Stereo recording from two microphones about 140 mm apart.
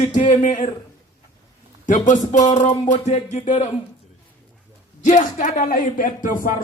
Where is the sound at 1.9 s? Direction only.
65° left (ahead or behind).